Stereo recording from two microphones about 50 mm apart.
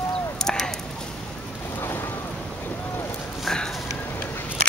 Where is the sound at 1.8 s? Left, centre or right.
Left.